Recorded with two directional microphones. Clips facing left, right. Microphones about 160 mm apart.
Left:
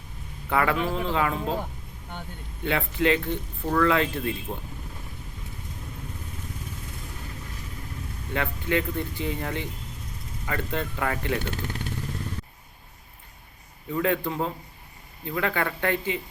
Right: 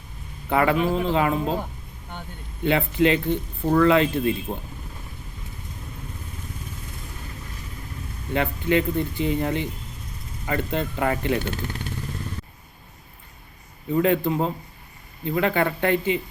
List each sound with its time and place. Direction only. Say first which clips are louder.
0.5 s speech: right 4 dB; 25° right (ahead or behind)
2.6 s speech: right 4 dB; 20° right (ahead or behind)
8.3 s speech: right 5 dB; 20° right (ahead or behind)
13.9 s speech: right 5 dB; 20° right (ahead or behind)